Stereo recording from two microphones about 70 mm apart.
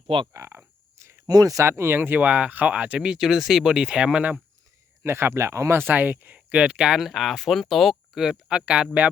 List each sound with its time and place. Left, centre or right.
0.3 s frog: right
1.0 s cricket: right
1.3 s speech: right
1.6 s speech: right; by 4.4 s centre
5.0 s speech: right; by 9.0 s centre